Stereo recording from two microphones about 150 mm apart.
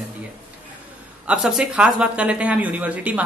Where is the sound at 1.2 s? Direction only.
5° right (ahead or behind).